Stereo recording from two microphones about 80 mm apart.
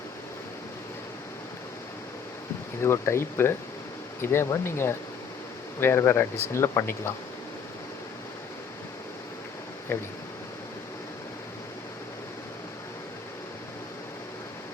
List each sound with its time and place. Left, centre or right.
2.8 s speech: left
9.9 s speech: left